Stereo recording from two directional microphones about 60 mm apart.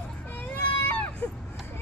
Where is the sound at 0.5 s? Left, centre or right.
Left.